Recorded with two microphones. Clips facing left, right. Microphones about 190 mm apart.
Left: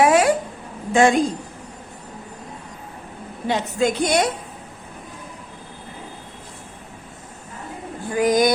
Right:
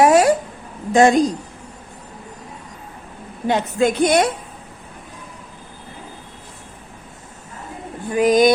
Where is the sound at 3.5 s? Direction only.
55° right (ahead or behind).